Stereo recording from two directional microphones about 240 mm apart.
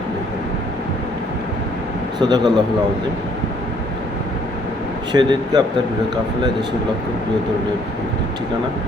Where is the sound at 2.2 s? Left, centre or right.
Centre.